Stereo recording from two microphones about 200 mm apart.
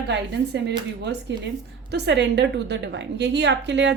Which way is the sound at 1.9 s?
60° right (ahead or behind).